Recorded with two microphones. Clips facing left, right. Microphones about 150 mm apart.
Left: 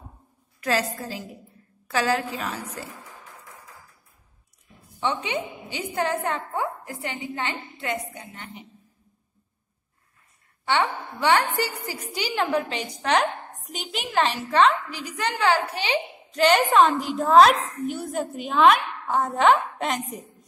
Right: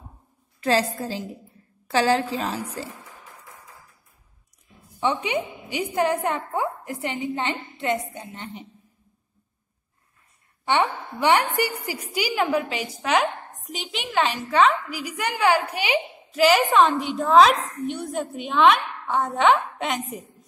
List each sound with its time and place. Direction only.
0.6 s a woman's voice: 30° right (ahead or behind)
5.0 s a woman's voice: 15° right (ahead or behind)
10.6 s a woman's voice: 20° right (ahead or behind); by 20.0 s centre (ahead or behind)